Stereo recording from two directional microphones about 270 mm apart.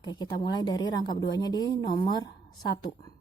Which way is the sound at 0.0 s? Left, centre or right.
Centre.